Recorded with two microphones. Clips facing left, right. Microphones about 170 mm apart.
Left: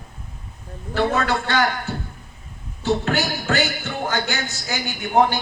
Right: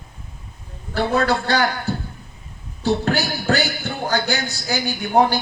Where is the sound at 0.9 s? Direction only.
35° right (ahead or behind).